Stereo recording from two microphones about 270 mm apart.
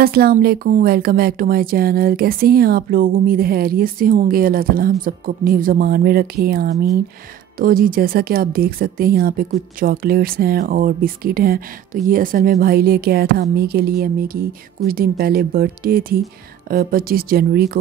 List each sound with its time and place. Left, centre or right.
0.0 s speech: right